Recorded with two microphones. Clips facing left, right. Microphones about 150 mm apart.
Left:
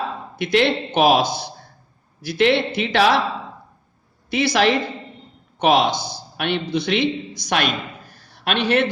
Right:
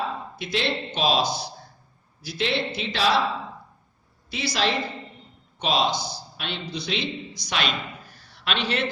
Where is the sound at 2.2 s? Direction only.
65° left (ahead or behind).